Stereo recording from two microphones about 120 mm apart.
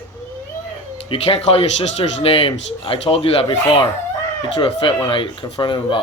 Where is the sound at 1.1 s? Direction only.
55° left (ahead or behind).